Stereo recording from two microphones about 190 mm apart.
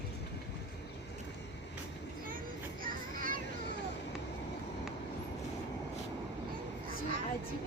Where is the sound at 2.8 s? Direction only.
45° right (ahead or behind).